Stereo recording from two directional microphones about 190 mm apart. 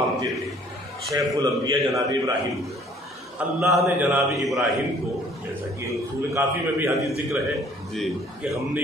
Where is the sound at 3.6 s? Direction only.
15° right (ahead or behind).